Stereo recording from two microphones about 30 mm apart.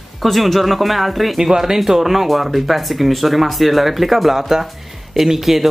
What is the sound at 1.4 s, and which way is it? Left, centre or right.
Speech, centre.